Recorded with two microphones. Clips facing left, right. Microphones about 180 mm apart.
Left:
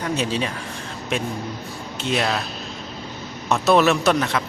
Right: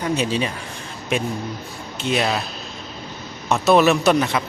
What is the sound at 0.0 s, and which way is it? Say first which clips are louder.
Speech: right 2 dB; 5° right (ahead or behind).